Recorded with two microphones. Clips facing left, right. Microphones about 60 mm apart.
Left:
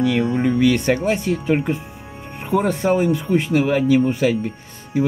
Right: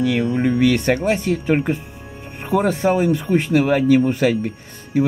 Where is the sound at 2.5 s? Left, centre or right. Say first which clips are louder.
Right 1 dB; centre.